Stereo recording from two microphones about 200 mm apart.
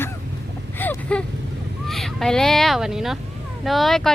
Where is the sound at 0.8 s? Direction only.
10° left (ahead or behind).